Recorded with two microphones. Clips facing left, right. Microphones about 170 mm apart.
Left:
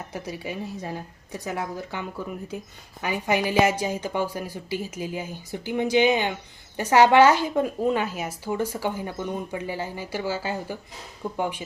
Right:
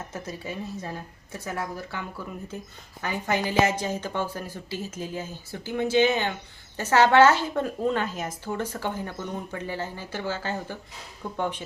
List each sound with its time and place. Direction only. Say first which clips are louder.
0.1 s a woman's voice: left 2 dB; 15° left (ahead or behind)